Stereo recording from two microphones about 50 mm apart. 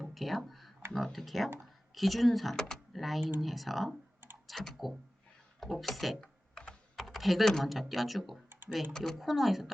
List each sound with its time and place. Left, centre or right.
0.0 s a sound: centre
0.9 s speech: centre
2.6 s speech: centre
2.9 s speech: centre
6.1 s typing: centre
6.9 s computer keyboard: centre
7.5 s speech: centre
8.9 s speech: centre
9.1 s speech: centre